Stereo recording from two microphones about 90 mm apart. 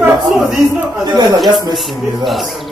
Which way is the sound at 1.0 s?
50° right (ahead or behind).